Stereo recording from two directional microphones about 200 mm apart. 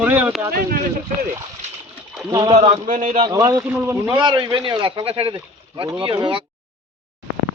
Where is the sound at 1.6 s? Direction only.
35° right (ahead or behind).